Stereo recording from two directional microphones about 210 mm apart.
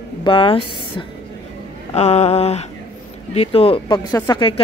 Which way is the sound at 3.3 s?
25° left (ahead or behind).